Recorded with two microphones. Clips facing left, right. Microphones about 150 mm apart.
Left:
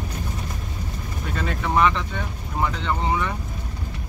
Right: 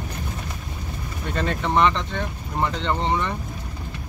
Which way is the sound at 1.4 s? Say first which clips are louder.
Right 1 dB; 5° left (ahead or behind).